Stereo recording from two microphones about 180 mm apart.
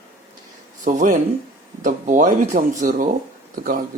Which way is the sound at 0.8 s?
45° right (ahead or behind).